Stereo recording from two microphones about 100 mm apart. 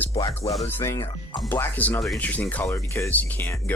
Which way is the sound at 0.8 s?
30° left (ahead or behind).